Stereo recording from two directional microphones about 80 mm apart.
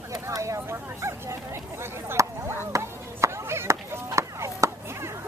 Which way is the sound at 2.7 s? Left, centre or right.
Right.